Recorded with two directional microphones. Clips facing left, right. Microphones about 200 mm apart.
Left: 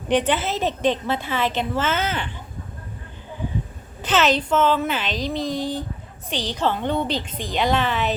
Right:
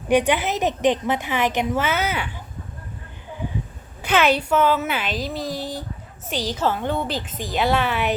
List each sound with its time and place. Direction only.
0.1 s a woman's voice: 10° right (ahead or behind)
4.0 s a woman's voice: 10° right (ahead or behind)